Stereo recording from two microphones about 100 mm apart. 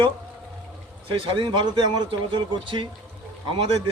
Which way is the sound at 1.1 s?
60° right (ahead or behind).